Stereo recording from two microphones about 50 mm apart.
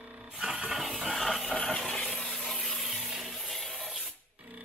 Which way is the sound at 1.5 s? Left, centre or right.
Centre.